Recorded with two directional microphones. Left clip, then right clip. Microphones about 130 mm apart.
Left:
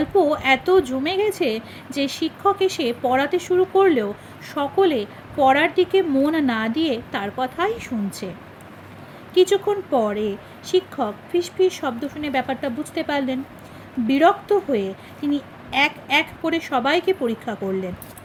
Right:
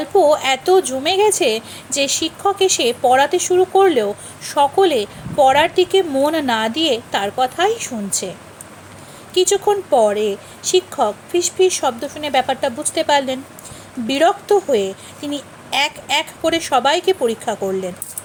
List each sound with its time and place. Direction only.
0.0 s a woman's voice: 40° right (ahead or behind)
9.3 s a woman's voice: 35° right (ahead or behind)